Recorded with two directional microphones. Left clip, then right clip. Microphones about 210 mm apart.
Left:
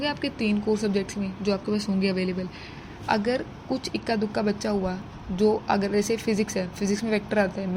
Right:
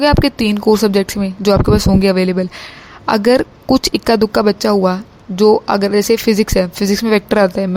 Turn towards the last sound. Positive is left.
turn(degrees=-55)  # may be behind; listen again after turning